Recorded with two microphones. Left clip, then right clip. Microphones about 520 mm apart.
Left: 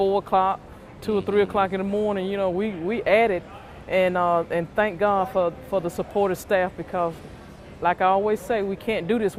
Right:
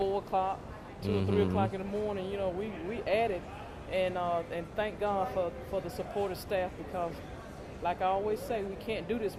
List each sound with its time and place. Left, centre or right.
0.0 s speech: left